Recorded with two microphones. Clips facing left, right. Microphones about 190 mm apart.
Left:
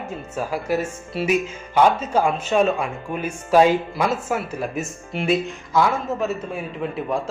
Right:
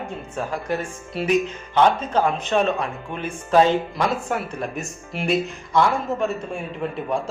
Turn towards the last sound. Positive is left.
turn(degrees=0)  # may be behind; listen again after turning